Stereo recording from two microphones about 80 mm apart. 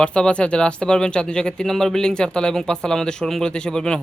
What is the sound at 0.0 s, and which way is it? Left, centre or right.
Speech, centre.